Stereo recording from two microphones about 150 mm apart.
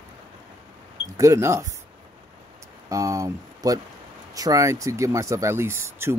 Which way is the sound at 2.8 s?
20° right (ahead or behind).